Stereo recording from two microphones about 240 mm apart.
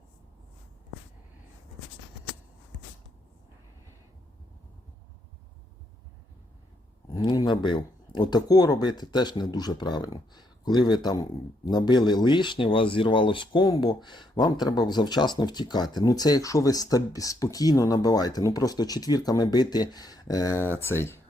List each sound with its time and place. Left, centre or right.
7.1 s speech: centre